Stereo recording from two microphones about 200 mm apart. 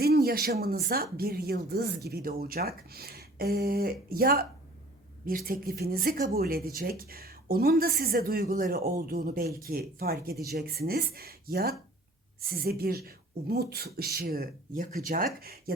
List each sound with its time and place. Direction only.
0.0 s speech: 50° right (ahead or behind)